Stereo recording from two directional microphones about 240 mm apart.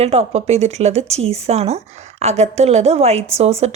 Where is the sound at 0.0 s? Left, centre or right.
Right.